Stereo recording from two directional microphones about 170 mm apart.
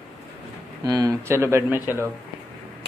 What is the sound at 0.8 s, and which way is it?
Speech, 20° right (ahead or behind).